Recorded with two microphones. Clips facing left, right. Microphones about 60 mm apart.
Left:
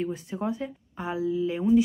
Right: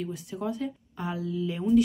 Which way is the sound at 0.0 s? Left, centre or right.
Left.